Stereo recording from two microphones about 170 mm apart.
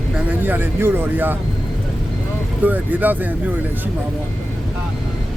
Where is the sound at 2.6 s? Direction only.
10° right (ahead or behind).